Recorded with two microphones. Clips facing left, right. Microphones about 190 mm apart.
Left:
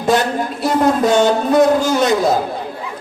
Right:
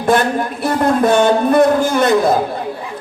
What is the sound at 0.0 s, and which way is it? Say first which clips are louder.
A man's voice: right 1 dB; 55° right (ahead or behind).